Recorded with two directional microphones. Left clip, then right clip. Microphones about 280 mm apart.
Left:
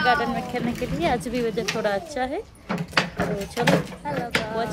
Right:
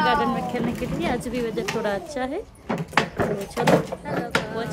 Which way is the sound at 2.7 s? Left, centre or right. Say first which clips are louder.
Right 1 dB; right.